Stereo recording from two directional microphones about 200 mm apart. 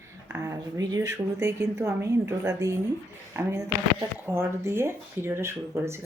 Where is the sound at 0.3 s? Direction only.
15° right (ahead or behind).